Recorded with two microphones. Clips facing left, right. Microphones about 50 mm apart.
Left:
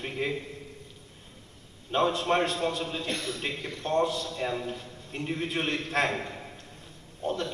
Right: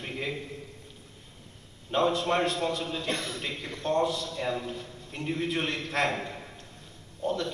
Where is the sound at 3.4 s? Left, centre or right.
Left.